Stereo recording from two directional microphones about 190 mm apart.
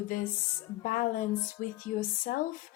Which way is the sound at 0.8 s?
45° left (ahead or behind).